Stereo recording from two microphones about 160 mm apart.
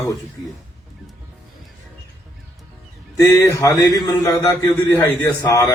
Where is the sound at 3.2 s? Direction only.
20° left (ahead or behind).